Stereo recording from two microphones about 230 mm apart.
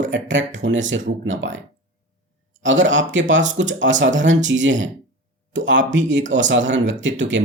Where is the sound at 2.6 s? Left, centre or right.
Right.